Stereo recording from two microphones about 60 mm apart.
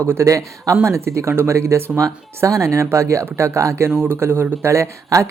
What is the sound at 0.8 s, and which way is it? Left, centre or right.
Speech, right.